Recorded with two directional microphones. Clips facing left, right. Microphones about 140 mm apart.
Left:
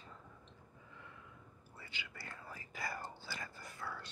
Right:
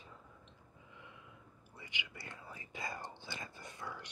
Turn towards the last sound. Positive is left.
turn(degrees=-20)  # may be behind; listen again after turning